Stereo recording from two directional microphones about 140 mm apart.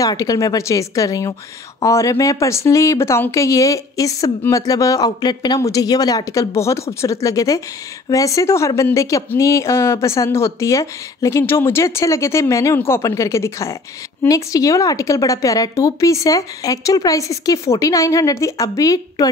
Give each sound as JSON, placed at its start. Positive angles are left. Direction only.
{"t": 0.0, "sound": "a woman's voice", "side_deg": 25}